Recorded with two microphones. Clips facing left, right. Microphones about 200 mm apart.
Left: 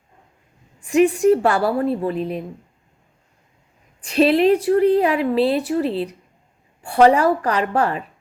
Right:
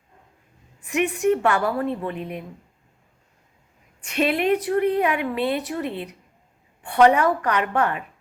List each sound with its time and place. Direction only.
0.8 s a woman's voice: 30° left (ahead or behind)
4.0 s a woman's voice: 30° left (ahead or behind)